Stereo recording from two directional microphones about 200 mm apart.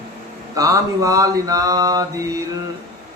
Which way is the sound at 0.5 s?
15° right (ahead or behind).